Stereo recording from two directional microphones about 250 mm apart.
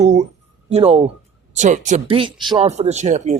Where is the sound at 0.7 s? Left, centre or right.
Right.